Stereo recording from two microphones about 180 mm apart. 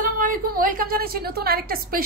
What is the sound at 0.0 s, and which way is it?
A woman's voice, 50° right (ahead or behind).